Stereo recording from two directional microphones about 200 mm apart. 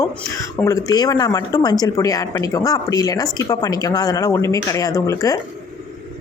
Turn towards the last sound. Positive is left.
turn(degrees=15)  # may be behind; listen again after turning